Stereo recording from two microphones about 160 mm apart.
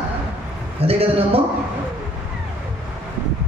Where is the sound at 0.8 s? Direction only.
35° right (ahead or behind).